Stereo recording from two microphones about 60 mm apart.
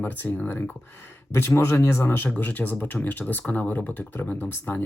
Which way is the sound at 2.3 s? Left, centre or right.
Left.